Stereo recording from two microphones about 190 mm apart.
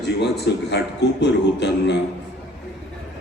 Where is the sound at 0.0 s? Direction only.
65° left (ahead or behind).